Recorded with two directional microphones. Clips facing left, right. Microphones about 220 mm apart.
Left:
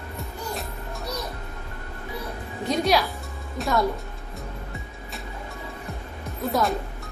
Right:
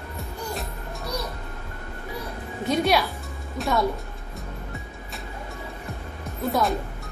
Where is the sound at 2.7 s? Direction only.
Centre (ahead or behind).